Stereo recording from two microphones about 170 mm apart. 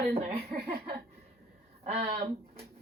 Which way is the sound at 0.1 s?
40° right (ahead or behind).